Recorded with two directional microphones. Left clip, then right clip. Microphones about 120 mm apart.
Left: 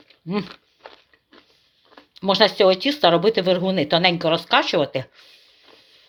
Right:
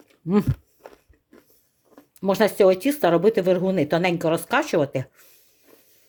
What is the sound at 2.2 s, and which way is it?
Speech, 40° right (ahead or behind).